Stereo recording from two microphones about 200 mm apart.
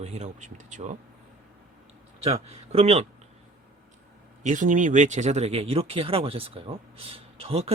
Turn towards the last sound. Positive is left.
turn(degrees=-30)  # may be behind; listen again after turning